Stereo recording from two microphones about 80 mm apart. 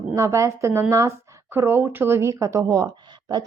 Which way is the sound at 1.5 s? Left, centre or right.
Right.